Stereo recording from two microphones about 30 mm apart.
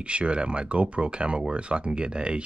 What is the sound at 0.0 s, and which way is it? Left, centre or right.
Speech, right.